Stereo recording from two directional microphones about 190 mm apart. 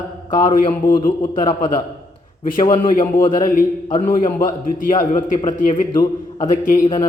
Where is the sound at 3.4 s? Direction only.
45° left (ahead or behind).